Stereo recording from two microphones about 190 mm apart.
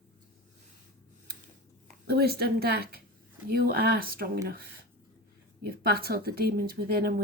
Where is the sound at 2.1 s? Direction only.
55° right (ahead or behind).